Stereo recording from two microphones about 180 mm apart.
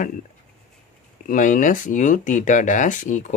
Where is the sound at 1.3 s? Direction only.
45° left (ahead or behind).